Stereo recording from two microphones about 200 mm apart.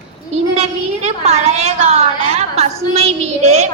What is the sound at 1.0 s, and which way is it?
Child singing, 30° right (ahead or behind).